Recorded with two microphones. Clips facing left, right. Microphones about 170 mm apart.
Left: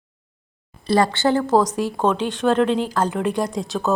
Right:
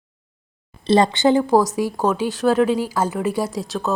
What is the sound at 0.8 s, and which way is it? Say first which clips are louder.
Speech: right 3 dB; 20° right (ahead or behind).